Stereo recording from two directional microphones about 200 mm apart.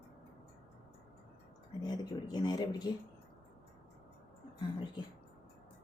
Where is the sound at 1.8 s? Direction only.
20° left (ahead or behind).